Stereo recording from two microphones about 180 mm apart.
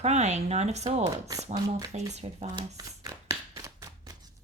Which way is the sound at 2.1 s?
35° right (ahead or behind).